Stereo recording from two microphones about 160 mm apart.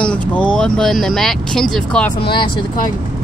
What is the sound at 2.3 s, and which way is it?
Speech, 30° left (ahead or behind).